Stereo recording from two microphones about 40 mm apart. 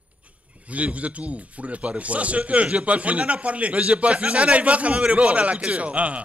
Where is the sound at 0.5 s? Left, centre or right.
Right.